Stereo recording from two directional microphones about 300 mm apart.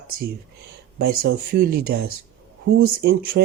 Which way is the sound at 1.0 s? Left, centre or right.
Right.